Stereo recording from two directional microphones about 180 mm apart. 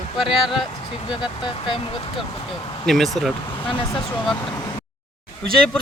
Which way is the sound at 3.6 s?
30° left (ahead or behind).